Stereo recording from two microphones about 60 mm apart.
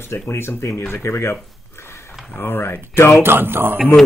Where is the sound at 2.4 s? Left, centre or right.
Left.